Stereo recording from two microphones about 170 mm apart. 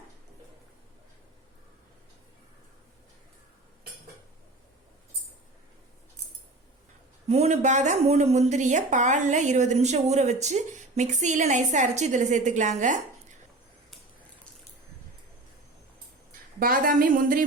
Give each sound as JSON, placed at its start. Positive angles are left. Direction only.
{"t": 7.3, "sound": "speech", "side_deg": -40}
{"t": 16.6, "sound": "a woman's voice", "side_deg": -55}